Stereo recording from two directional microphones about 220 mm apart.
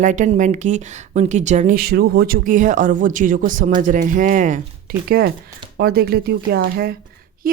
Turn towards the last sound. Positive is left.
turn(degrees=-45)  # may be behind; listen again after turning